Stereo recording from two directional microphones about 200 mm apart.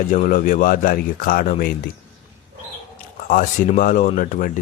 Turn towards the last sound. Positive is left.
turn(degrees=40)  # may be behind; listen again after turning